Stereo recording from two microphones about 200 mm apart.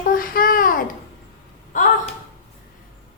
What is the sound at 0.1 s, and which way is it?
Babbling, 45° left (ahead or behind).